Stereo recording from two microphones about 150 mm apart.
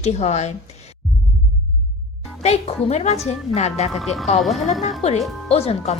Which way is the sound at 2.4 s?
45° left (ahead or behind).